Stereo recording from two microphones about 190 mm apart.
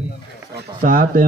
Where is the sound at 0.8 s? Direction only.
50° right (ahead or behind).